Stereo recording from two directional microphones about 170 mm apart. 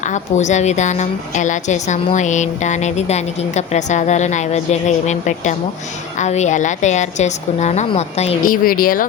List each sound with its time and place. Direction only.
0.1 s speech: 45° left (ahead or behind)
8.4 s speech: 55° left (ahead or behind)